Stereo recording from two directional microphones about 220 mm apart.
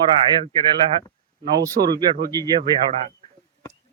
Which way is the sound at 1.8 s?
45° right (ahead or behind).